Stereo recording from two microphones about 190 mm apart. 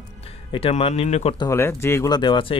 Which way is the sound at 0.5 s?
30° left (ahead or behind).